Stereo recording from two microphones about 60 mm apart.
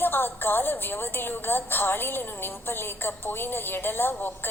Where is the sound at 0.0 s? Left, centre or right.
Left.